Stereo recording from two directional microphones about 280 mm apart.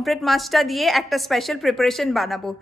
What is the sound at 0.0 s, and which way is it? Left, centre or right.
A woman's voice, centre.